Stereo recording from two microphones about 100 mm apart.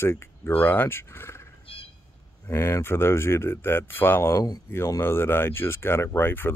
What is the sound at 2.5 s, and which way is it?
Speech, 25° left (ahead or behind).